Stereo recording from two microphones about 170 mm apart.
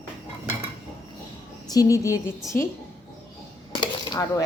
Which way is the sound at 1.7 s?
20° left (ahead or behind).